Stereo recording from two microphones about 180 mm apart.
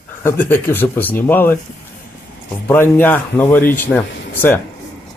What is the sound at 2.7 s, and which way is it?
Speech, 10° left (ahead or behind).